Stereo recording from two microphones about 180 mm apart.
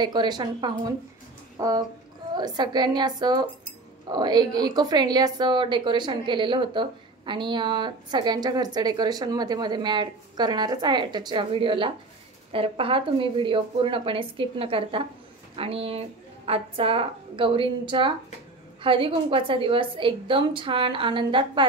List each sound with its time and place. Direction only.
0.0 s a woman's voice: 25° right (ahead or behind)